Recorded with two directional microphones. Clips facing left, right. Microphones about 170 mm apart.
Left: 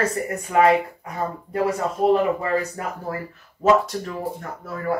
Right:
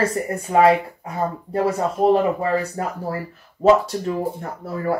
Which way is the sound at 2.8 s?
30° right (ahead or behind).